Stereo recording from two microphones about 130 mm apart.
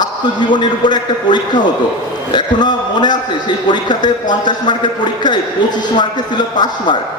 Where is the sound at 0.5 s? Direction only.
35° left (ahead or behind).